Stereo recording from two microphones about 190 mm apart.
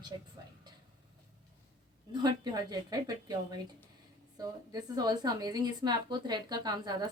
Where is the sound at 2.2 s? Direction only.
20° right (ahead or behind).